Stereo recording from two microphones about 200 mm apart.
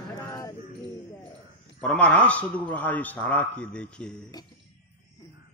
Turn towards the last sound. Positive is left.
turn(degrees=5)  # may be behind; listen again after turning